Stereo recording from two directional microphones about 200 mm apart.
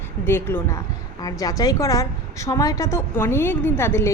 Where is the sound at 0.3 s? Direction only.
10° left (ahead or behind).